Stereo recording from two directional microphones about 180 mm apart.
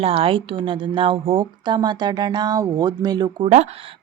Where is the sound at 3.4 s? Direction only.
35° right (ahead or behind).